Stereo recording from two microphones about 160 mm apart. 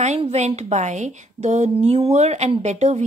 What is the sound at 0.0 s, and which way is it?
A woman's voice, 45° right (ahead or behind).